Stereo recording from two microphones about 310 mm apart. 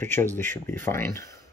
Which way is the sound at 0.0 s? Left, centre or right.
Centre.